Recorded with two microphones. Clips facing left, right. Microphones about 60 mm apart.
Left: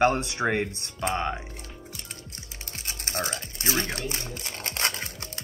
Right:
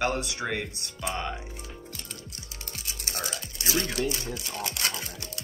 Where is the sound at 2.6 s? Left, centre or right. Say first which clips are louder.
Left 2 dB; left.